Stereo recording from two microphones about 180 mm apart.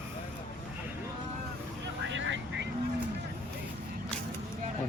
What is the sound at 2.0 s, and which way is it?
Vehicle, 90° right.